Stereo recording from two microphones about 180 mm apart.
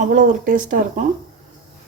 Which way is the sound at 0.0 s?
45° right (ahead or behind).